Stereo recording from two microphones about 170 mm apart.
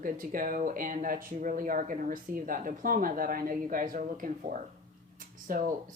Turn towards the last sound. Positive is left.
turn(degrees=-55)  # may be behind; listen again after turning